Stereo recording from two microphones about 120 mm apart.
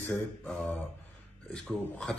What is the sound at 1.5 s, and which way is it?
Speech, 5° left (ahead or behind).